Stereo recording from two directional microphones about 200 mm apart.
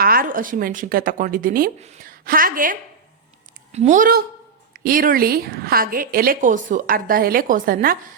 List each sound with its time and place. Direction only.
0.0 s a woman's voice: 45° right (ahead or behind)